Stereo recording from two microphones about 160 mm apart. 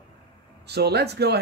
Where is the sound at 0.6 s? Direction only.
90° right.